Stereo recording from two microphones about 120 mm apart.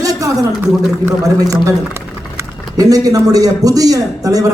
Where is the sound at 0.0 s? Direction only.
30° right (ahead or behind).